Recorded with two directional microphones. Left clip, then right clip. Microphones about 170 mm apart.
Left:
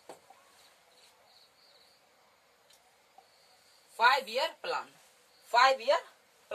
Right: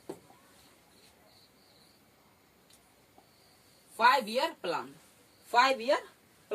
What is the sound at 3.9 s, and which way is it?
Speech, 15° left (ahead or behind).